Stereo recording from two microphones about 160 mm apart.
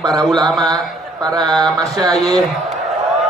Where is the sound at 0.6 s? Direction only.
25° right (ahead or behind).